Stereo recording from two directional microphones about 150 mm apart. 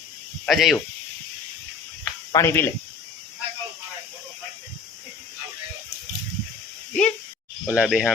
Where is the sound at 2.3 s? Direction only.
15° left (ahead or behind).